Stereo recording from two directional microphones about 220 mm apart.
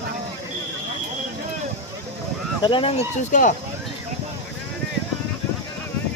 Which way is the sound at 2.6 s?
20° left (ahead or behind).